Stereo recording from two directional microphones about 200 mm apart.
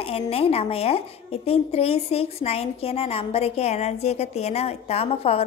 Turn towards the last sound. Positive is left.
turn(degrees=30)  # may be behind; listen again after turning